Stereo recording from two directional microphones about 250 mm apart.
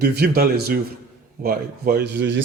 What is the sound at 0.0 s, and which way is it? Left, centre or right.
A man's voice, right.